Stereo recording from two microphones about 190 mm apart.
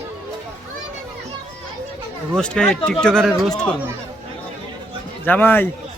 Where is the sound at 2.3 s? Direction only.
5° left (ahead or behind).